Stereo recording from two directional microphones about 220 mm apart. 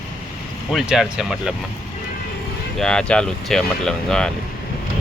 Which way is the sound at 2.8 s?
5° left (ahead or behind).